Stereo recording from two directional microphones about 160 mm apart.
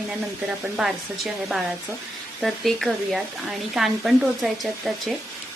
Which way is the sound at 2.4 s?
Centre (ahead or behind).